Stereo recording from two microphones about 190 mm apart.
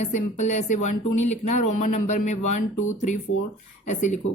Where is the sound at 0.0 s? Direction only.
40° left (ahead or behind).